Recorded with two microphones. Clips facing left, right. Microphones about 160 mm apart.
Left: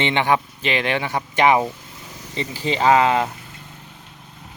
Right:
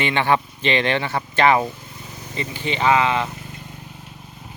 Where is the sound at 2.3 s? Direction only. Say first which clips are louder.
Left 2 dB; 35° left (ahead or behind).